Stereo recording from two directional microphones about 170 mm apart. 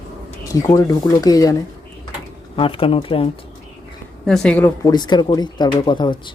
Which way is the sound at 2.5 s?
30° left (ahead or behind).